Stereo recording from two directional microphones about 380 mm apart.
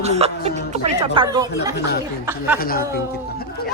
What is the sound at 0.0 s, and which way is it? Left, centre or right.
Speech, centre.